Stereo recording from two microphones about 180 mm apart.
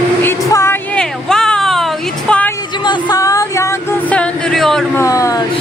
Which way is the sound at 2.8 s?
25° left (ahead or behind).